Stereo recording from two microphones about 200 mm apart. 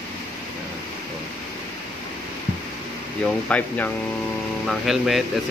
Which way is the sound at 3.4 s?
10° left (ahead or behind).